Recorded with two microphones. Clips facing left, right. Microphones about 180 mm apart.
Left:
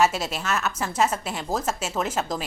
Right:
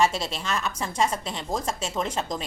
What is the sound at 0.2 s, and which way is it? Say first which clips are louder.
A woman's voice: left 2 dB; 5° left (ahead or behind).